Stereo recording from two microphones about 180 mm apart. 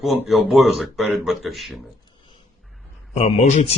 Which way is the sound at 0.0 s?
Centre (ahead or behind).